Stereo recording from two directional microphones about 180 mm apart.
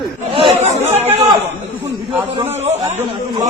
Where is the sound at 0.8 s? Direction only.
35° right (ahead or behind).